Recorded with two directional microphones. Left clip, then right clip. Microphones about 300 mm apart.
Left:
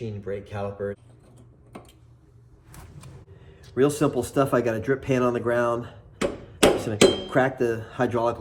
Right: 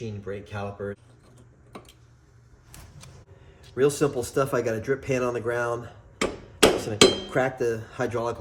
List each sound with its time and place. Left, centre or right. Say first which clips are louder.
0.0 s speech: left 3 dB; centre
3.8 s speech: left 1 dB; centre
5.9 s hammer: left 1 dB; centre
7.3 s speech: left 2 dB; centre